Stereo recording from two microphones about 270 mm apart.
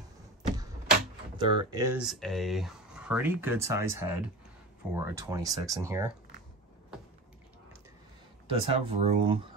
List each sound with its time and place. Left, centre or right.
1.4 s speech: centre
8.5 s speech: right